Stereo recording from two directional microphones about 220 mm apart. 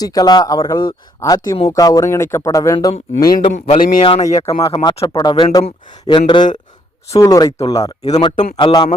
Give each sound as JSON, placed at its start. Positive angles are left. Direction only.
{"t": 0.0, "sound": "speech", "side_deg": 15}
{"t": 3.7, "sound": "speech", "side_deg": 30}